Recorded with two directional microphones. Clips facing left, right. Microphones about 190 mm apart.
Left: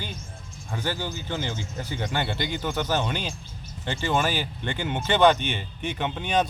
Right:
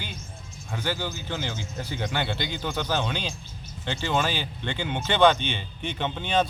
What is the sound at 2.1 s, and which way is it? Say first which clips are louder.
Speech: left 2 dB; 15° left (ahead or behind).